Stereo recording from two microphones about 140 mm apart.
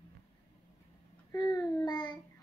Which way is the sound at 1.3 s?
30° left (ahead or behind).